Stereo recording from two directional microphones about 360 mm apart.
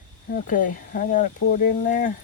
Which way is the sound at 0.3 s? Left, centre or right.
Left.